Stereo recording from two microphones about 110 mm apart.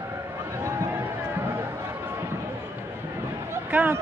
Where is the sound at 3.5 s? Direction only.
15° right (ahead or behind).